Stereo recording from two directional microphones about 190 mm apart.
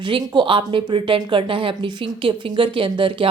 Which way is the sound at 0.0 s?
25° right (ahead or behind).